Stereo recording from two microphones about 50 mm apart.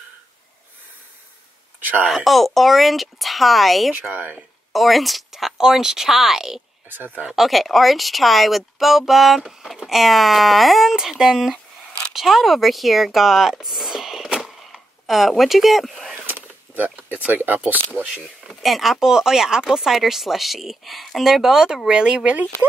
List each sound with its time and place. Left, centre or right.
1.8 s a sound: right
2.0 s speech: centre
4.1 s speech: right
4.7 s speech: centre
6.9 s speech: right
7.3 s speech: centre
16.3 s a sound: right
17.1 s speech: right
18.0 s speech: right
18.5 s speech: centre; by 22.7 s right